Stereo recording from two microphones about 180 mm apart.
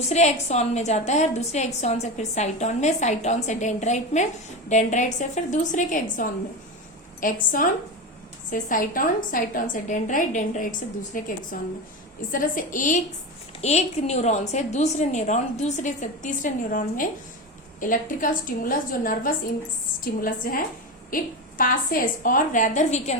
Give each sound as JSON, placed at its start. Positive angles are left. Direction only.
{"t": 0.0, "sound": "a woman's voice", "side_deg": 40}